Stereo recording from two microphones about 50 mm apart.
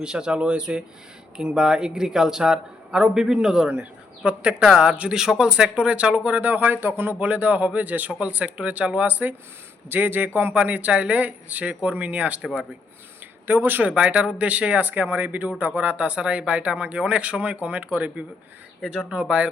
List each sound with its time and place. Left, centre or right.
0.0 s speech: centre
3.7 s speech: right
6.7 s a man's voice: right
7.2 s a man's voice: right
10.5 s speech: right
10.9 s speech: centre
11.2 s speech: right
13.5 s speech: right
13.9 s speech: right